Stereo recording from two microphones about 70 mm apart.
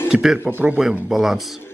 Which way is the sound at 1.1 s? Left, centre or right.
Centre.